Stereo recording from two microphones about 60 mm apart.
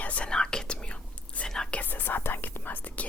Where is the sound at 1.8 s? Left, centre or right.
Left.